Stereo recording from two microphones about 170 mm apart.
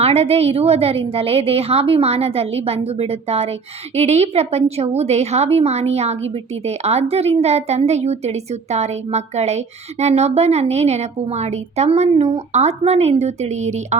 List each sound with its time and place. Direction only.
0.0 s a woman's voice: 35° right (ahead or behind)